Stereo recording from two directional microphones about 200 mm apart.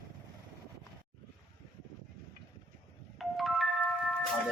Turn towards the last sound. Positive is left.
turn(degrees=0)  # may be behind; listen again after turning